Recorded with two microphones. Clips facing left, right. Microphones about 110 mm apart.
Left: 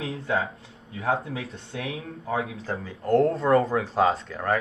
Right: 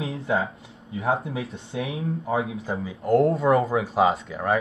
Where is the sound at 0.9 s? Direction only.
25° right (ahead or behind).